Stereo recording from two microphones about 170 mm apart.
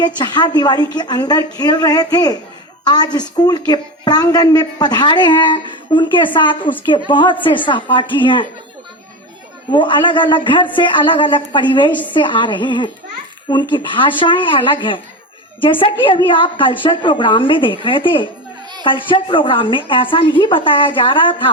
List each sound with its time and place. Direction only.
0.0 s a woman's voice: 25° left (ahead or behind)
9.7 s a woman's voice: 30° left (ahead or behind)